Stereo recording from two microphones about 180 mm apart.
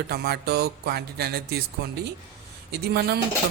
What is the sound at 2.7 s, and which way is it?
Speech, 65° right (ahead or behind).